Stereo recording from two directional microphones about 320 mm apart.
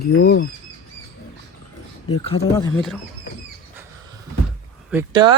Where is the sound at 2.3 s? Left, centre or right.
Left.